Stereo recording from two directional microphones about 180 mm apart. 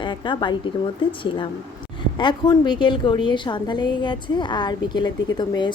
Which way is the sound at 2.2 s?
25° left (ahead or behind).